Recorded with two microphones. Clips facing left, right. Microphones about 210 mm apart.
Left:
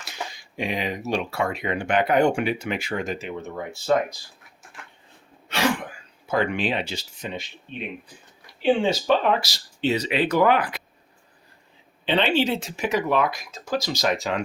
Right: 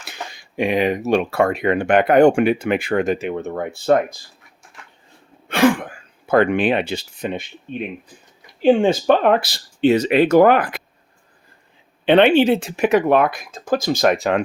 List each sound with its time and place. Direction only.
0.0 s speech: 60° right (ahead or behind)
5.5 s throat clearing: 50° right (ahead or behind)
6.2 s speech: 60° right (ahead or behind)
12.0 s speech: 55° right (ahead or behind)